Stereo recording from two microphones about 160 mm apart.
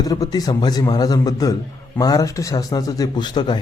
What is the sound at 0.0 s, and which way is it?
A man's voice, 20° left (ahead or behind).